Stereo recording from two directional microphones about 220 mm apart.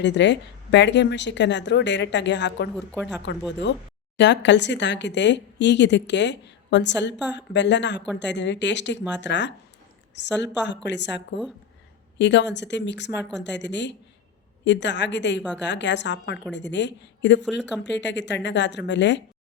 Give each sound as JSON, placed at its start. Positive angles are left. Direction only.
{"t": 0.0, "sound": "speech", "side_deg": 55}
{"t": 2.7, "sound": "speech", "side_deg": 5}
{"t": 4.2, "sound": "speech", "side_deg": 55}